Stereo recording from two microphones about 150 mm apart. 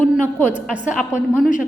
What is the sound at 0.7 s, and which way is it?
Speech, 5° right (ahead or behind).